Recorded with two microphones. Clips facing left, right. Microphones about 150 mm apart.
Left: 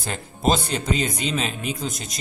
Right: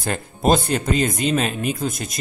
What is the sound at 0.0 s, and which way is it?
Speech, 50° right (ahead or behind).